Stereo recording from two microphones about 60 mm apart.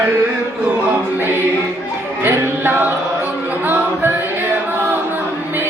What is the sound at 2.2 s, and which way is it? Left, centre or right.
Music, right.